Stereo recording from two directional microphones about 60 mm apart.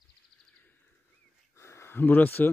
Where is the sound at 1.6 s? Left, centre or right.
Left.